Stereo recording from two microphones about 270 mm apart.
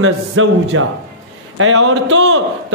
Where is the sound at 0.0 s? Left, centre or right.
Right.